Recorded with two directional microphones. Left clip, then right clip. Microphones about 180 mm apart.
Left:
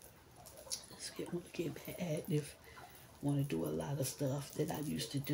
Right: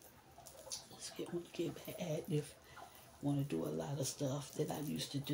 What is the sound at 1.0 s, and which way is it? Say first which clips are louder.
Speech: right 1 dB; 30° left (ahead or behind).